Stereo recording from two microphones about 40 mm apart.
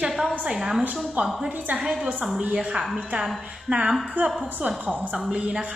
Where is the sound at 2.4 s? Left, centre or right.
Right.